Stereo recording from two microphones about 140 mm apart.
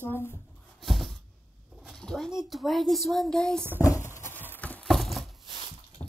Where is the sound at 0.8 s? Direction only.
Centre (ahead or behind).